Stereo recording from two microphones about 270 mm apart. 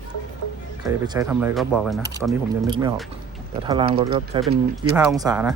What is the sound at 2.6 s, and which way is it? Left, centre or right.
Speech, centre.